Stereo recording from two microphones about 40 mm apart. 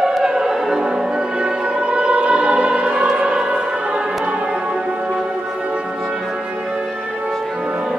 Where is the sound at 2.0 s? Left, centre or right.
Right.